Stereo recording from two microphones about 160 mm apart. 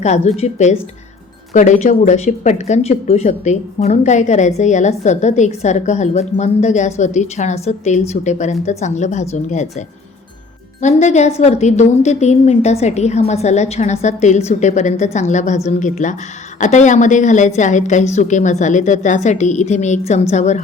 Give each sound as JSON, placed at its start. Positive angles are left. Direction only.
{"t": 0.0, "sound": "speech", "side_deg": 45}